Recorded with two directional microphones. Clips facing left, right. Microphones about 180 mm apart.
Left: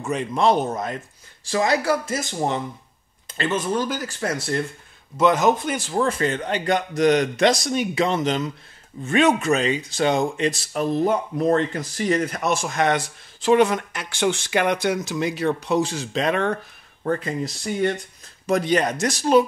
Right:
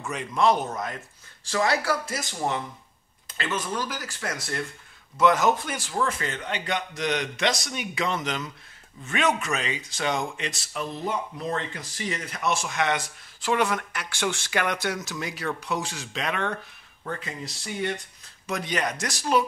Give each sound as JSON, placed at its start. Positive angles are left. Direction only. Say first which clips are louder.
{"t": 0.0, "sound": "speech", "louder": "left 3 dB", "side_deg": 25}
{"t": 1.4, "sound": "speech", "louder": "left 4 dB", "side_deg": 15}
{"t": 3.7, "sound": "speech", "louder": "left 7 dB", "side_deg": 25}
{"t": 5.9, "sound": "speech", "louder": "left 6 dB", "side_deg": 35}
{"t": 7.6, "sound": "speech", "louder": "left 8 dB", "side_deg": 30}
{"t": 13.4, "sound": "speech", "louder": "left 8 dB", "side_deg": 20}
{"t": 18.5, "sound": "speech", "louder": "left 8 dB", "side_deg": 35}